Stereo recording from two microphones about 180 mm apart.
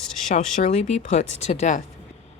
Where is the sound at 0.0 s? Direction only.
Centre (ahead or behind).